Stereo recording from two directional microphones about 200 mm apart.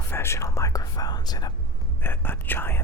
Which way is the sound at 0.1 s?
10° left (ahead or behind).